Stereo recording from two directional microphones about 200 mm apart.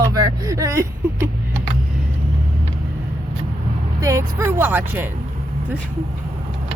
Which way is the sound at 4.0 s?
15° right (ahead or behind).